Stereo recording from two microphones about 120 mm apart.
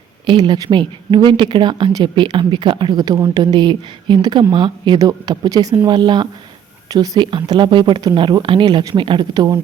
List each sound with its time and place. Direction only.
0.3 s speech: 40° right (ahead or behind)